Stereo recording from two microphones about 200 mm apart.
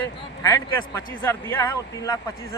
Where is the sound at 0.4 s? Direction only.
15° left (ahead or behind).